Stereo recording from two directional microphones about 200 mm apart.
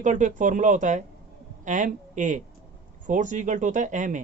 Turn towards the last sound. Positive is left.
turn(degrees=-40)  # may be behind; listen again after turning